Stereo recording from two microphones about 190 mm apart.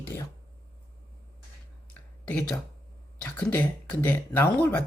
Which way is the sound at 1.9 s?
5° left (ahead or behind).